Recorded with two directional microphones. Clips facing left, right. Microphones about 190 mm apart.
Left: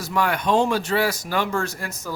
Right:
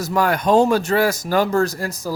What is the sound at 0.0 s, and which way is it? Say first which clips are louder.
A man's voice: right 4 dB; 40° right (ahead or behind).